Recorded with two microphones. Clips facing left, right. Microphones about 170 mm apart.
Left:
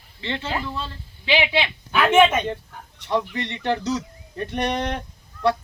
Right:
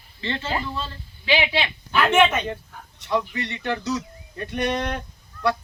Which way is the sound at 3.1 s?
25° left (ahead or behind).